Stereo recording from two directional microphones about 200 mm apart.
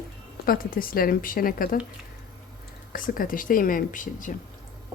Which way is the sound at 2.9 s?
45° left (ahead or behind).